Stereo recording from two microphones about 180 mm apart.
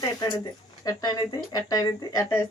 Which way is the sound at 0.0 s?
20° left (ahead or behind).